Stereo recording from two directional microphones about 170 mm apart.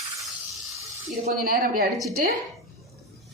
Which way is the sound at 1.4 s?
55° right (ahead or behind).